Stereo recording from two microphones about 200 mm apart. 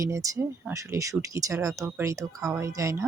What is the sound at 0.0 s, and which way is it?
Speech, 15° right (ahead or behind).